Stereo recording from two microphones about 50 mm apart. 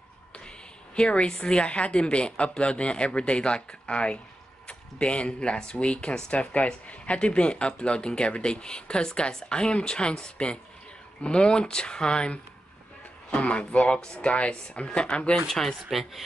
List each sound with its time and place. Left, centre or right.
0.9 s speech: centre
15.4 s speech: centre